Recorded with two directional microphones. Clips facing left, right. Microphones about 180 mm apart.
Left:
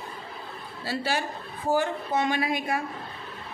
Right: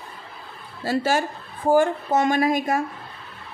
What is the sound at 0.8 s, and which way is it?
Speech, 45° right (ahead or behind).